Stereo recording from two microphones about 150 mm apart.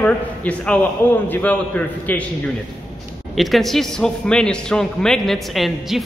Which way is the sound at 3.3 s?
Centre (ahead or behind).